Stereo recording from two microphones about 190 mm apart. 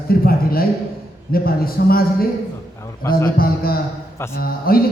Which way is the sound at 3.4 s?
50° left (ahead or behind).